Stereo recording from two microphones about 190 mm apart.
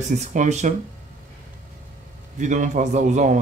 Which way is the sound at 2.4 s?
40° right (ahead or behind).